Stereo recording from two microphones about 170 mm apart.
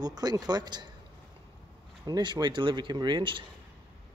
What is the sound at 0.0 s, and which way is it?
Speech, 25° right (ahead or behind).